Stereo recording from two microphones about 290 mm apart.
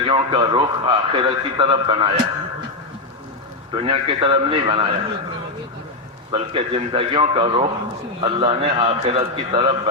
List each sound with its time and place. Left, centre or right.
0.0 s a man's voice: centre
3.8 s a man's voice: centre
6.3 s a man's voice: centre